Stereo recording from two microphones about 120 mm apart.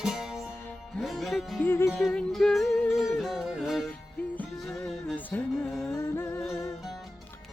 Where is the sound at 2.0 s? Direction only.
5° left (ahead or behind).